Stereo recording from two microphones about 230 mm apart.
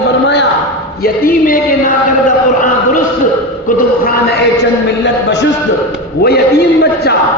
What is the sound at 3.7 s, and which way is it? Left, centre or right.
A man's voice, left.